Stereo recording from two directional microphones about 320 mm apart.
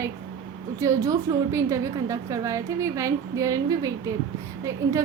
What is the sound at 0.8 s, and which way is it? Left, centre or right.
A woman's voice, centre.